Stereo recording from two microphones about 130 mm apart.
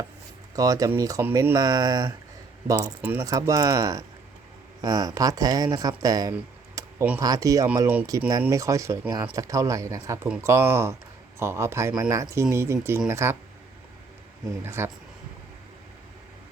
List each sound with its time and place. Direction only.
0.5 s speech: 25° right (ahead or behind)
6.8 s a sound: 25° right (ahead or behind)
7.2 s speech: 30° right (ahead or behind)
14.5 s speech: 20° right (ahead or behind)